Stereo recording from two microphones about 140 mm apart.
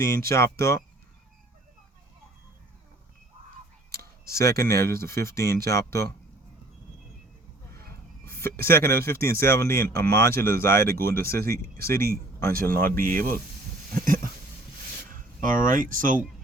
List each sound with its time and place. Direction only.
0.3 s speech: 20° left (ahead or behind)
4.4 s speech: 20° left (ahead or behind)
8.2 s a sound: 15° left (ahead or behind)
8.6 s speech: 15° left (ahead or behind)
12.1 s speech: 90° right
13.9 s a sound: 75° right (ahead or behind)
15.1 s speech: 75° right (ahead or behind)